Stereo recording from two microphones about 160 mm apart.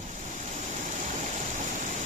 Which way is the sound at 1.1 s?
50° right (ahead or behind).